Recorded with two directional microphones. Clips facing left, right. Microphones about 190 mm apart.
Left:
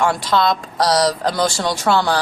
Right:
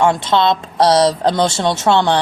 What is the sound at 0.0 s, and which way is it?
Speech, 25° right (ahead or behind).